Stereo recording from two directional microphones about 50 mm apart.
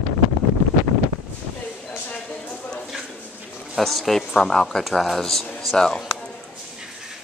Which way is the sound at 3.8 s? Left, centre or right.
Centre.